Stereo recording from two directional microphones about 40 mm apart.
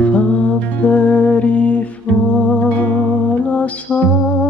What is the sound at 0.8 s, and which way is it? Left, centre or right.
Music, left.